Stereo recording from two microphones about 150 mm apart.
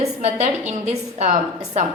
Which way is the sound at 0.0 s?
50° right (ahead or behind).